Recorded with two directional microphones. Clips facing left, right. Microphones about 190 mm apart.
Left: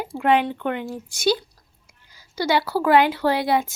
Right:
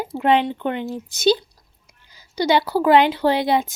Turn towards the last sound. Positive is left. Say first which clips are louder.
# right 2 dB
turn(degrees=-20)  # may be behind; listen again after turning